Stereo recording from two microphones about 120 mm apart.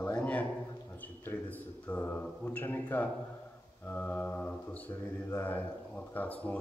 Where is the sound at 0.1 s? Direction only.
10° left (ahead or behind).